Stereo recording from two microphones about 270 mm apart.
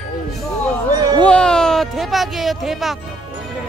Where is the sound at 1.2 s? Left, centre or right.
Centre.